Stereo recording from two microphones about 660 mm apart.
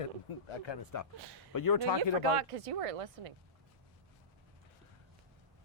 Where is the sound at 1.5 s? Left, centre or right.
Left.